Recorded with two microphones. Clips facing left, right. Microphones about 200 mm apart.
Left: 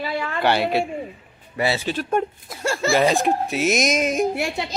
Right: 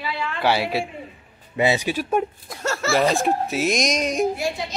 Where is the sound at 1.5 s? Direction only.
15° right (ahead or behind).